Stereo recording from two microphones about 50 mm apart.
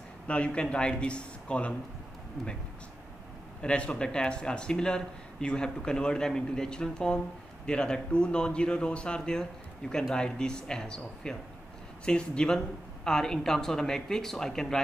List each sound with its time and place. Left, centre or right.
0.3 s a man's voice: left
3.6 s speech: left